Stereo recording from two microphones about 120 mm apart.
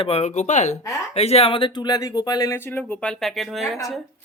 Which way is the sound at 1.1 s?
60° left (ahead or behind).